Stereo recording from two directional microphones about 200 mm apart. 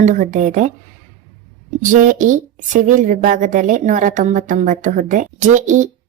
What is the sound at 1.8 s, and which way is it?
A woman's voice, 40° right (ahead or behind).